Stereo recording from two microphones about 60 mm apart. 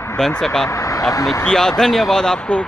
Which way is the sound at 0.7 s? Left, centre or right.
Left.